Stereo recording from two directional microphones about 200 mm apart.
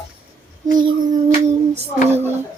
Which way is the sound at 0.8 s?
20° right (ahead or behind).